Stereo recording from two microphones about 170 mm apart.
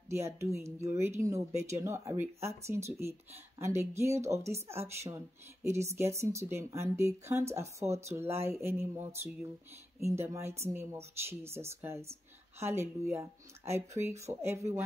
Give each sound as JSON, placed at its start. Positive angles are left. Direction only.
{"t": 0.1, "sound": "speech", "side_deg": -15}